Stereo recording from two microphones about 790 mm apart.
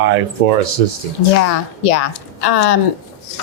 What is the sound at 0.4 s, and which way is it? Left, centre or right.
Speech, right.